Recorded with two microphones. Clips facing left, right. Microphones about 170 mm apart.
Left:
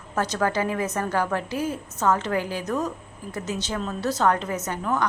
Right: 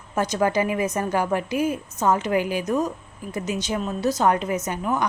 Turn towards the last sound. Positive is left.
turn(degrees=-15)  # may be behind; listen again after turning